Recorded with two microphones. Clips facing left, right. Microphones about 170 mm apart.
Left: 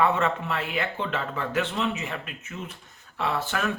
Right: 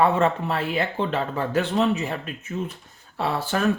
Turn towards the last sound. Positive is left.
turn(degrees=-35)  # may be behind; listen again after turning